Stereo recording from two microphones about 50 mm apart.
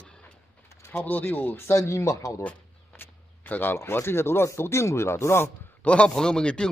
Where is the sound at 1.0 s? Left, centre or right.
Left.